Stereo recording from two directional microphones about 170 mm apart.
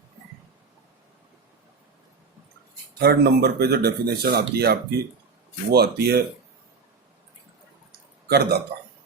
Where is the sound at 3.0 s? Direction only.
70° right (ahead or behind).